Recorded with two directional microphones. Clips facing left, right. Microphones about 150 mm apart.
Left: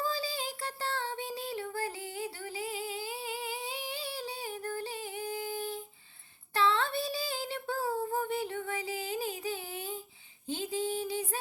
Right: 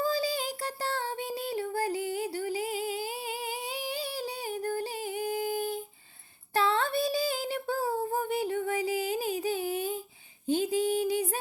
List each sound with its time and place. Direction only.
0.0 s child singing: 40° right (ahead or behind)
6.5 s female singing: 40° right (ahead or behind)
10.4 s a sound: 45° right (ahead or behind)